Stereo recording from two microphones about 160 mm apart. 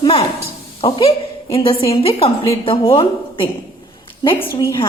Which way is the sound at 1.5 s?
35° left (ahead or behind).